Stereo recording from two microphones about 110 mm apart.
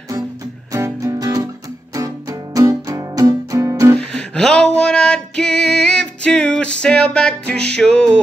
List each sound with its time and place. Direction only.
0.7 s music: 30° right (ahead or behind)
3.9 s music: 10° left (ahead or behind)